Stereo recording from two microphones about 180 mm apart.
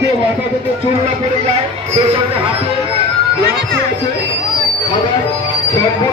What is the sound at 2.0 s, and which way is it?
Speech, 30° right (ahead or behind).